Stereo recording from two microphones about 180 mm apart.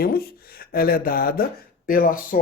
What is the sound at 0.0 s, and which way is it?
Speech, 55° left (ahead or behind).